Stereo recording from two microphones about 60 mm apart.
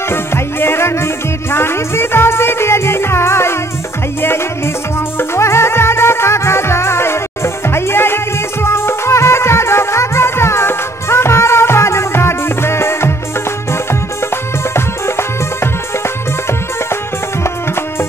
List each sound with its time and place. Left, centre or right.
0.1 s music: left
5.3 s music: left
15.0 s music: left